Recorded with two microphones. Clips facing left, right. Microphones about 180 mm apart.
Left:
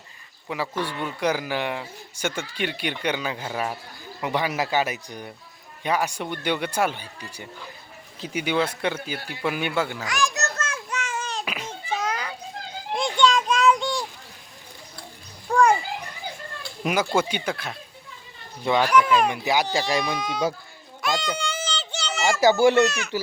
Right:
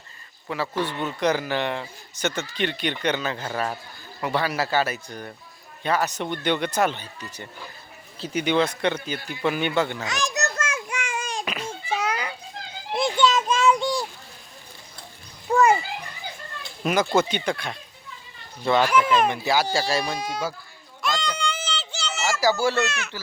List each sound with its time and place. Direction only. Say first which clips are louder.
0.4 s a man's voice: right 1 dB; 10° left (ahead or behind)
10.0 s a sound: left 1 dB; 20° right (ahead or behind)
11.4 s a sound: right 2 dB; 10° left (ahead or behind)
11.9 s children playing: right 1 dB; 10° right (ahead or behind)
15.5 s children playing: even; 5° right (ahead or behind)
16.8 s a man's voice: right 2 dB; 10° left (ahead or behind)
18.9 s speech: left 1 dB; 5° right (ahead or behind)
19.3 s a man's voice: even; 15° left (ahead or behind)
20.1 s speech: left 1 dB; 10° right (ahead or behind)
21.0 s a sound: left 1 dB; centre (ahead or behind)
22.4 s a child's voice: left 5 dB; 20° left (ahead or behind)
22.8 s speech: left 6 dB; centre (ahead or behind)